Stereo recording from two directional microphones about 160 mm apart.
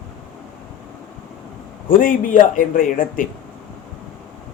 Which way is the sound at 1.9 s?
60° left (ahead or behind).